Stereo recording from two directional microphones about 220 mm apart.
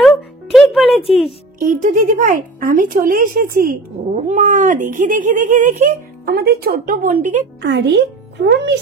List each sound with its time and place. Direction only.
0.0 s music: centre (ahead or behind)
1.6 s speech: 35° right (ahead or behind)
7.6 s speech: 50° right (ahead or behind)